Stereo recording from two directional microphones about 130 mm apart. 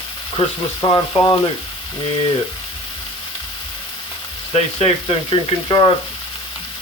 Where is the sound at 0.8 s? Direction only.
35° left (ahead or behind).